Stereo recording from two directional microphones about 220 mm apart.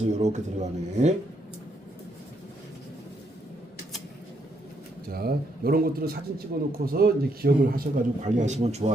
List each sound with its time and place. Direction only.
0.0 s a man's voice: 30° right (ahead or behind)
5.0 s a man's voice: 45° right (ahead or behind)